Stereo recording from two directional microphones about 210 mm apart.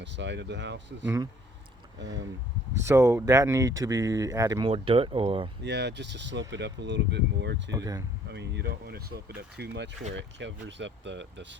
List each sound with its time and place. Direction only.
0.0 s speech: 55° right (ahead or behind)
1.0 s speech: 15° right (ahead or behind)
2.0 s speech: 60° right (ahead or behind)
2.8 s speech: 15° right (ahead or behind)
5.6 s speech: 55° right (ahead or behind)
7.7 s speech: 15° right (ahead or behind)
8.3 s speech: 55° right (ahead or behind)